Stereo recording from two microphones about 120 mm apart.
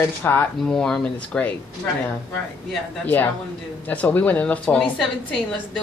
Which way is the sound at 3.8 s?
15° left (ahead or behind).